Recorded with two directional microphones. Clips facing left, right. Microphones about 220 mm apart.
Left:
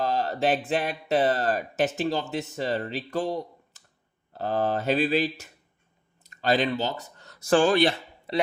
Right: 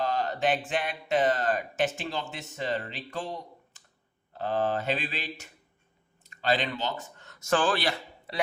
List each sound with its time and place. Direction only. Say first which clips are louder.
0.0 s a sound: left 3 dB; 35° left (ahead or behind)
0.7 s speech: left 3 dB; 35° left (ahead or behind)
7.6 s speech: left 7 dB; 20° left (ahead or behind)